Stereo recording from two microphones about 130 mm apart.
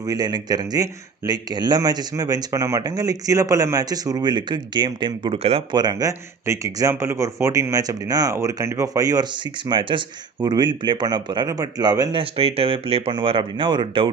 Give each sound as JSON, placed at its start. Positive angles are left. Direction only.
{"t": 0.0, "sound": "speech", "side_deg": -30}
{"t": 5.7, "sound": "speech", "side_deg": -30}
{"t": 12.2, "sound": "speech", "side_deg": -50}